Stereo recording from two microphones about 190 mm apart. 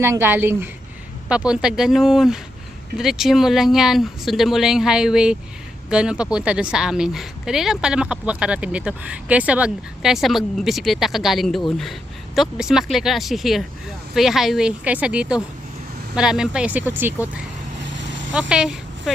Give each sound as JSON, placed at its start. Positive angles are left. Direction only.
{"t": 0.0, "sound": "speech", "side_deg": -10}
{"t": 17.9, "sound": "vehicle", "side_deg": -75}
{"t": 18.3, "sound": "speech", "side_deg": -5}